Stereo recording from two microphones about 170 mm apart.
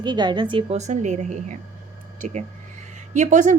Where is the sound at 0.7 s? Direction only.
45° right (ahead or behind).